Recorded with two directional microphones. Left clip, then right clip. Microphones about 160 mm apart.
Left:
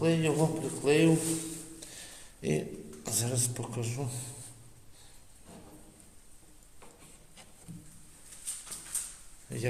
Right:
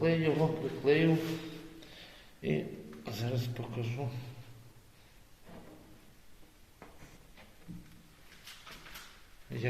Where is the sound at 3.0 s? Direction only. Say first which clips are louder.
Left 5 dB; 40° left (ahead or behind).